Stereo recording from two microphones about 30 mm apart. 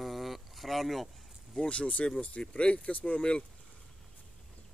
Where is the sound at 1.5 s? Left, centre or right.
Left.